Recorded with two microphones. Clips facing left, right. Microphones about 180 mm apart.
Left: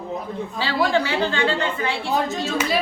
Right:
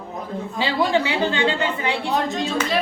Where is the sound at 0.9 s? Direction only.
20° right (ahead or behind).